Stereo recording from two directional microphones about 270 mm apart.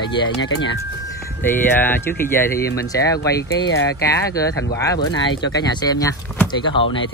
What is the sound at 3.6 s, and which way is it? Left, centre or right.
Speech, left.